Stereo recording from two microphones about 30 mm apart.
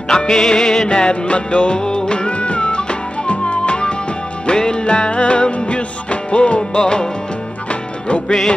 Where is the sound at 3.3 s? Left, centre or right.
Left.